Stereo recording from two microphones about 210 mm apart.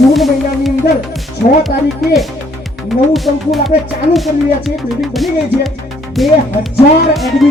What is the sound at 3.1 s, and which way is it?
Speech, centre (ahead or behind).